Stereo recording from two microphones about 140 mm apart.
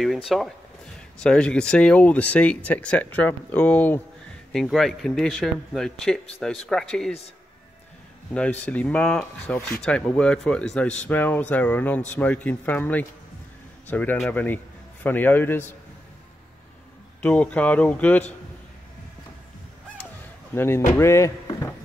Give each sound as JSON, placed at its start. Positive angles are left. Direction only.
{"t": 0.0, "sound": "speech", "side_deg": 0}
{"t": 4.5, "sound": "speech", "side_deg": 0}
{"t": 8.3, "sound": "speech", "side_deg": 10}
{"t": 17.2, "sound": "speech", "side_deg": 10}
{"t": 20.5, "sound": "speech", "side_deg": 15}